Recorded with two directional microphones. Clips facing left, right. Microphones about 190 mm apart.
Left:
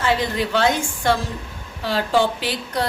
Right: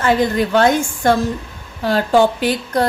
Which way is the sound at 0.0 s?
50° right (ahead or behind).